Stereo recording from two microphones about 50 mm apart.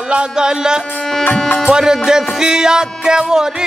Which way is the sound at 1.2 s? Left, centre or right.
Left.